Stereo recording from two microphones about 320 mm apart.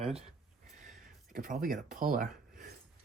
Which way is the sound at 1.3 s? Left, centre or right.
Right.